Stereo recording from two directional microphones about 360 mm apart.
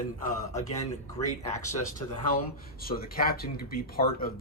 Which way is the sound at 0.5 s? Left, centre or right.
Centre.